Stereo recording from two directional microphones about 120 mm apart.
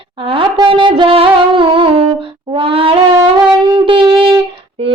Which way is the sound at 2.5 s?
50° right (ahead or behind).